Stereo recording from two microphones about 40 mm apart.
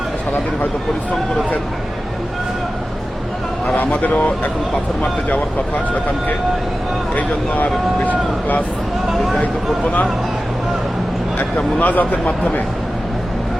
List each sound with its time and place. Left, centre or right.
3.8 s speech: left
7.2 s speech: left
9.1 s speech: centre
9.4 s speech: left
11.3 s speech: left